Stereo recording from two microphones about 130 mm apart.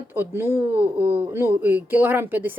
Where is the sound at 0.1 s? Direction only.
15° right (ahead or behind).